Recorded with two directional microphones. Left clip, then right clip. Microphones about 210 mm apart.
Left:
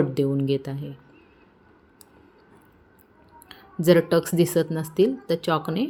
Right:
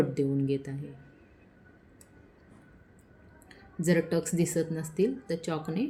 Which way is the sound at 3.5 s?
15° left (ahead or behind).